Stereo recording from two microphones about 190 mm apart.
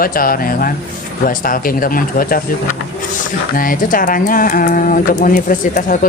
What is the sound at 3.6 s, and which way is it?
Speech, 45° left (ahead or behind).